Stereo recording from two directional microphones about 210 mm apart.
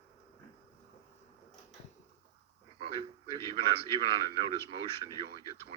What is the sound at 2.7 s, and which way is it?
Radio, 25° right (ahead or behind).